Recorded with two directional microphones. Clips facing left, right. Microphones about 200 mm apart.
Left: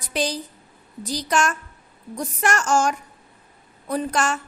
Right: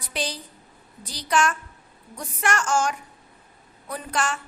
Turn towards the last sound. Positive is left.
turn(degrees=40)  # may be behind; listen again after turning